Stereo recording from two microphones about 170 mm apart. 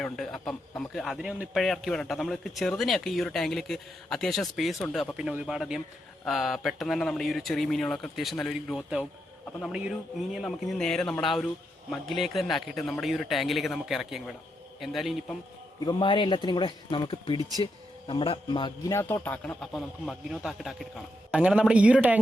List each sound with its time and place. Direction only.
0.0 s a man's voice: 5° left (ahead or behind)
15.8 s a man's voice: 25° left (ahead or behind); by 22.2 s 10° right (ahead or behind)